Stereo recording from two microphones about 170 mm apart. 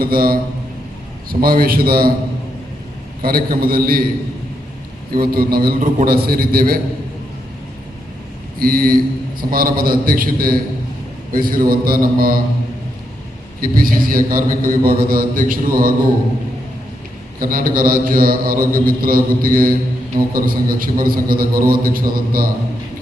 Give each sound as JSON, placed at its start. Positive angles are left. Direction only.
{"t": 0.0, "sound": "a man's voice", "side_deg": -60}
{"t": 3.2, "sound": "a man's voice", "side_deg": -60}
{"t": 5.1, "sound": "a man's voice", "side_deg": -60}
{"t": 8.5, "sound": "a man's voice", "side_deg": -60}
{"t": 13.6, "sound": "a man's voice", "side_deg": -55}
{"t": 17.4, "sound": "a man's voice", "side_deg": -55}